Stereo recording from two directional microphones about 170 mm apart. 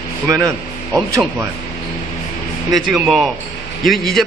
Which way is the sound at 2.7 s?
Centre (ahead or behind).